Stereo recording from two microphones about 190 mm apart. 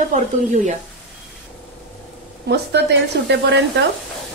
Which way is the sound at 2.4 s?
60° right (ahead or behind).